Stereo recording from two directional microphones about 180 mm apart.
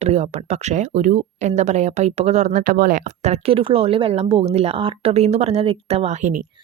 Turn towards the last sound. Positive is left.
turn(degrees=-40)  # may be behind; listen again after turning